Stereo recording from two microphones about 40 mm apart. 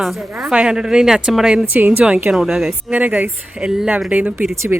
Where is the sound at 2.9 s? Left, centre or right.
Right.